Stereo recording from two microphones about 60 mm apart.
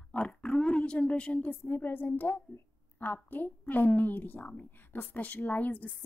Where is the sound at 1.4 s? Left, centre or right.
Left.